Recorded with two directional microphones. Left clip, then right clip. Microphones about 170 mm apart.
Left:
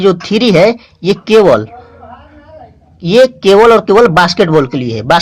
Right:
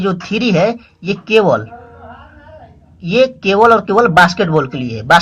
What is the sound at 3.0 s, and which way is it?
Speech, 35° left (ahead or behind).